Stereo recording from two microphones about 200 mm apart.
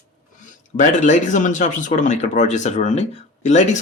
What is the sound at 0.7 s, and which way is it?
Speech, 40° left (ahead or behind).